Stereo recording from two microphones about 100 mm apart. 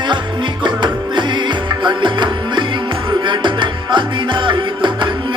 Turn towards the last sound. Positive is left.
turn(degrees=-55)  # may be behind; listen again after turning